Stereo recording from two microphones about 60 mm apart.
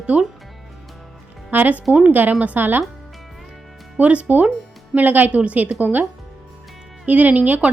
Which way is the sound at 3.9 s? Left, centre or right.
Right.